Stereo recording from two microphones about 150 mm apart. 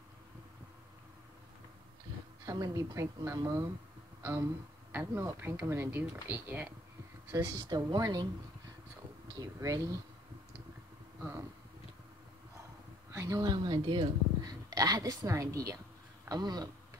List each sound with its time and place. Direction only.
2.4 s a woman's voice: 25° right (ahead or behind)
9.4 s a woman's voice: 20° right (ahead or behind)
13.1 s speech: 20° right (ahead or behind)